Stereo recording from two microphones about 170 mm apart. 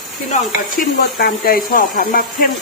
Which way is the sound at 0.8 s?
60° left (ahead or behind).